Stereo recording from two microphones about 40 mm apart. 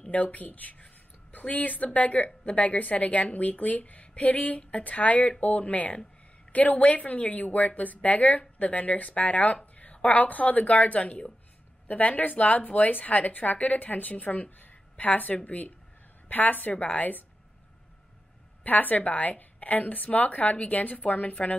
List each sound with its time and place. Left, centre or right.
0.1 s speech: left
0.7 s a sound: left
2.0 s a woman's voice: left
11.9 s a woman's voice: left
18.6 s a woman's voice: left